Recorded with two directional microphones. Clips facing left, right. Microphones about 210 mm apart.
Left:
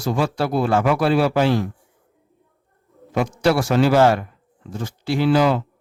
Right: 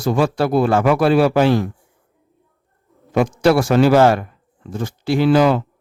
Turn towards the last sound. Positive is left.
turn(degrees=-55)  # may be behind; listen again after turning